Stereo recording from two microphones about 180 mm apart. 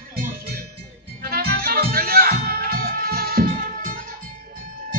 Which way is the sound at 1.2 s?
55° right (ahead or behind).